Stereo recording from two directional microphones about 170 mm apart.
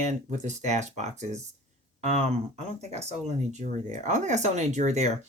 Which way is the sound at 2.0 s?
40° right (ahead or behind).